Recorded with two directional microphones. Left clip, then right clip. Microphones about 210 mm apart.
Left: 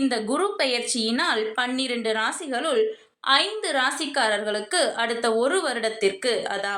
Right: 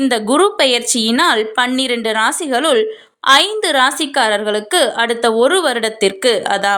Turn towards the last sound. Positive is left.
turn(degrees=-45)  # may be behind; listen again after turning